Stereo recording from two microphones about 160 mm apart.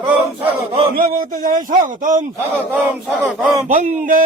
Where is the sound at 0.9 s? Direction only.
65° right (ahead or behind).